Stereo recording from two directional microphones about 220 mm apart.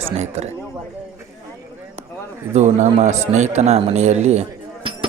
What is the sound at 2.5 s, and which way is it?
A man's voice, 30° right (ahead or behind).